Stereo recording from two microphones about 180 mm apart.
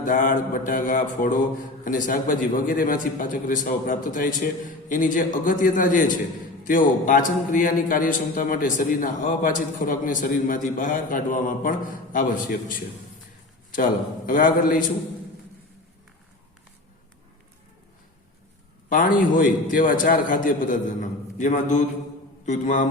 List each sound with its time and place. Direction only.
0.0 s a man's voice: 50° left (ahead or behind)
14.3 s a man's voice: 50° left (ahead or behind)
18.9 s a man's voice: 50° left (ahead or behind)